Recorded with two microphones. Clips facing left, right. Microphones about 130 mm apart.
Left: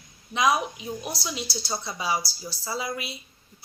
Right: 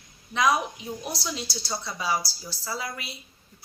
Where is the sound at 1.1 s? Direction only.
10° left (ahead or behind).